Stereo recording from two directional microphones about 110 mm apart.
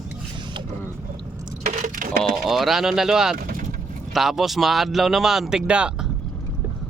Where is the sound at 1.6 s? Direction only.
90° right.